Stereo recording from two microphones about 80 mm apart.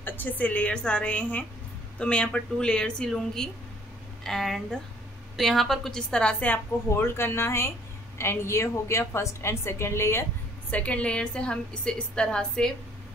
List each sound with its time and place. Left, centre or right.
0.0 s a woman's voice: left; by 6.3 s centre
6.9 s a woman's voice: left
10.7 s a woman's voice: centre